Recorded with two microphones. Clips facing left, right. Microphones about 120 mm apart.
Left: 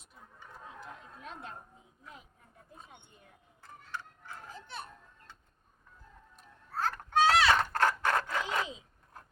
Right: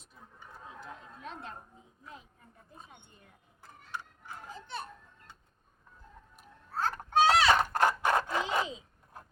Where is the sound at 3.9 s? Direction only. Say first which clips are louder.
Right 1 dB; 15° right (ahead or behind).